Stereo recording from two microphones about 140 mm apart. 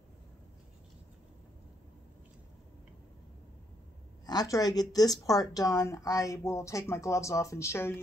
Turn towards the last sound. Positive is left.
turn(degrees=20)  # may be behind; listen again after turning